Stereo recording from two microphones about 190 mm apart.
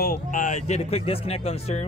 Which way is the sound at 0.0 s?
45° left (ahead or behind).